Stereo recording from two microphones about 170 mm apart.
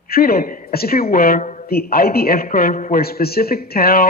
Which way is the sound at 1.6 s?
65° left (ahead or behind).